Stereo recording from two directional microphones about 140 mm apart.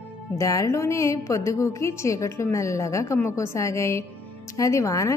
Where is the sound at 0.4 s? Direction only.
20° left (ahead or behind).